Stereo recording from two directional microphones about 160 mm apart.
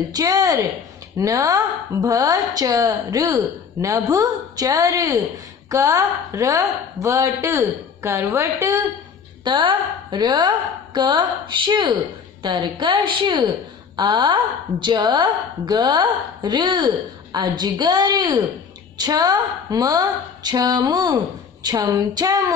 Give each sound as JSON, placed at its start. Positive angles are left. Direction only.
{"t": 0.1, "sound": "a woman's voice", "side_deg": -20}
{"t": 9.4, "sound": "a woman's voice", "side_deg": -30}